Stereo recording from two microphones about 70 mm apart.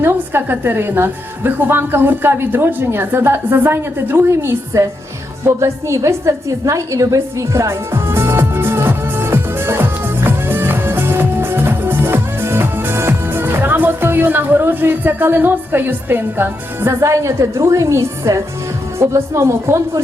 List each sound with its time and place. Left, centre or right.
0.0 s a woman's voice: right
5.5 s a sound: right
18.9 s a woman's voice: right